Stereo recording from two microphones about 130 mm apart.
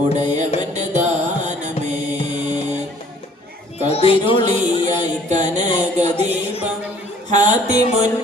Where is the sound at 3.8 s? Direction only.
50° left (ahead or behind).